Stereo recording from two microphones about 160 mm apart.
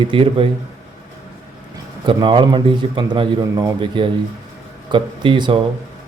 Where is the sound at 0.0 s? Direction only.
35° right (ahead or behind).